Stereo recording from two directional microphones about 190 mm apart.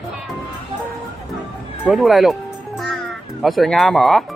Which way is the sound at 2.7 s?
Centre (ahead or behind).